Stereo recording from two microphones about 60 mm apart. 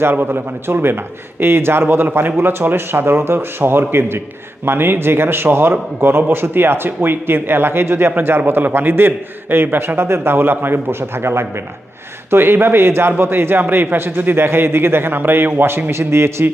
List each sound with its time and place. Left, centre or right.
0.0 s a man's voice: right